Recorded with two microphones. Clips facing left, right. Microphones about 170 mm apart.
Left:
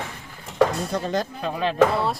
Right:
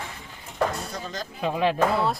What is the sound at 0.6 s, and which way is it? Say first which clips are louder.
Speech: left 6 dB; 65° left (ahead or behind).